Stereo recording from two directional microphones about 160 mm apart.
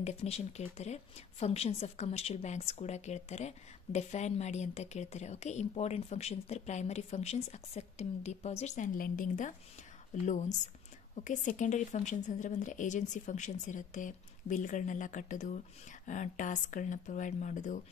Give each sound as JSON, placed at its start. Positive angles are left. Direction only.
{"t": 0.0, "sound": "a woman's voice", "side_deg": 40}